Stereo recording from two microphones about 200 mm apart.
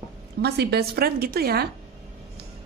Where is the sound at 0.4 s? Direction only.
55° right (ahead or behind).